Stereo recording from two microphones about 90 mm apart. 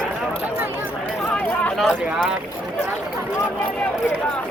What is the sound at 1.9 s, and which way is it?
Boat, 10° right (ahead or behind).